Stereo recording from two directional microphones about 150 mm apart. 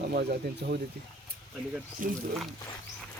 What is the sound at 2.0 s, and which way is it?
Speech, 65° right (ahead or behind).